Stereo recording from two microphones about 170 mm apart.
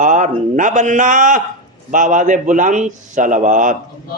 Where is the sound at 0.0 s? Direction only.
50° right (ahead or behind).